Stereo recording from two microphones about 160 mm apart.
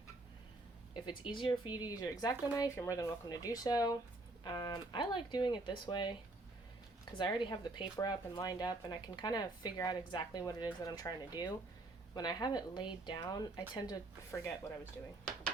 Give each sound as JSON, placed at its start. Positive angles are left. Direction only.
{"t": 1.0, "sound": "speech", "side_deg": 35}
{"t": 7.2, "sound": "speech", "side_deg": 30}